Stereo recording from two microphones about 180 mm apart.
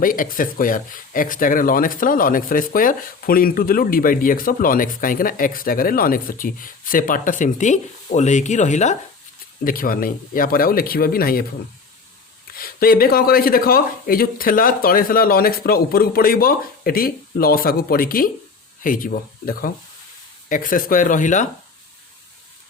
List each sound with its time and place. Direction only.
0.0 s speech: 50° left (ahead or behind)
9.6 s speech: 50° left (ahead or behind)
12.5 s speech: 55° left (ahead or behind)